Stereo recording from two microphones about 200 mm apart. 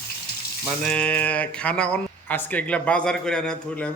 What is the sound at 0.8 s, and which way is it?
Speech, 5° left (ahead or behind).